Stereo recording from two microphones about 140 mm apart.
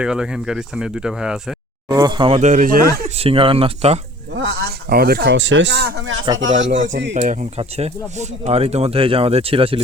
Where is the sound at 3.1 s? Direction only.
45° right (ahead or behind).